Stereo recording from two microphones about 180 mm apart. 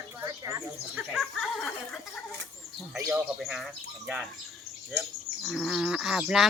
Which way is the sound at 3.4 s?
Centre (ahead or behind).